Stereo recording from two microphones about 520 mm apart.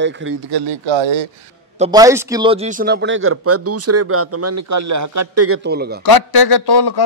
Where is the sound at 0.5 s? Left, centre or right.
Right.